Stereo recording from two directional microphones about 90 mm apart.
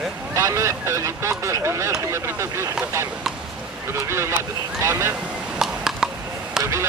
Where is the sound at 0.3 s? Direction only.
35° right (ahead or behind).